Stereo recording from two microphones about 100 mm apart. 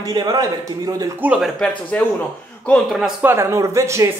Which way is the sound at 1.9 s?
15° left (ahead or behind).